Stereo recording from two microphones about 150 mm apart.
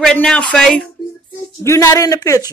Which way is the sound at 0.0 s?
5° left (ahead or behind).